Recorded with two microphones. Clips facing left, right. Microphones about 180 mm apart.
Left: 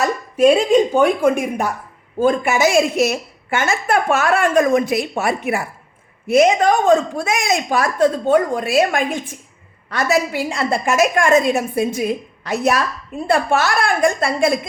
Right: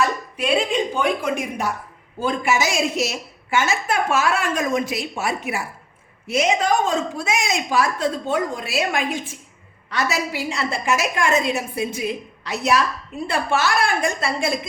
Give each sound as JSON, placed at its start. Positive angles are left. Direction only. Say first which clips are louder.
{"t": 0.0, "sound": "a woman's voice", "louder": "left 9 dB", "side_deg": 45}